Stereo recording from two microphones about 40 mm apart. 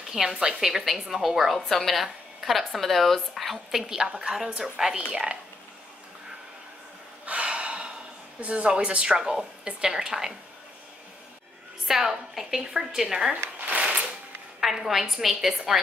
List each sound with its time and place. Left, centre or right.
0.1 s a woman's voice: centre
3.7 s a woman's voice: centre
7.2 s gasp: right
8.4 s a woman's voice: right
9.2 s a woman's voice: centre
11.9 s a woman's voice: centre
13.6 s shuffling cards: right
14.6 s a woman's voice: centre